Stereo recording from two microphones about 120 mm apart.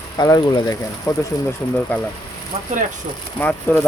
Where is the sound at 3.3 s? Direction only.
15° left (ahead or behind).